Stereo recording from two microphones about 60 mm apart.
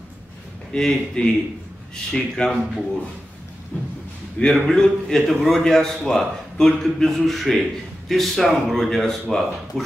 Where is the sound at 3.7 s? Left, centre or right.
Left.